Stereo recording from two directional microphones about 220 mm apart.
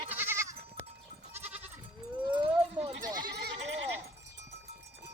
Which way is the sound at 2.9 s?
40° right (ahead or behind).